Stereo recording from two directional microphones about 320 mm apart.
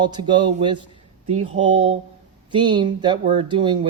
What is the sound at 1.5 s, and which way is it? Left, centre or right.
Speech, right.